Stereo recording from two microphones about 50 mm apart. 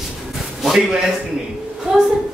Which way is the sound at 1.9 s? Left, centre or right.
Centre.